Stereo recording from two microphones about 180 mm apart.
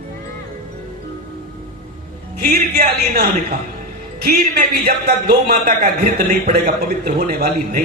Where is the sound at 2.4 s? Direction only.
60° right (ahead or behind).